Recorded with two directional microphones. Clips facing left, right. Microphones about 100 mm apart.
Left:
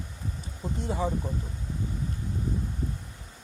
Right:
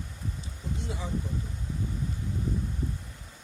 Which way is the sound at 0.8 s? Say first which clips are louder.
Left 11 dB; 45° left (ahead or behind).